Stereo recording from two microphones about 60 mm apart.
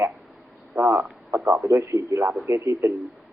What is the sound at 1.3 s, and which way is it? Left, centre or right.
Speech, right.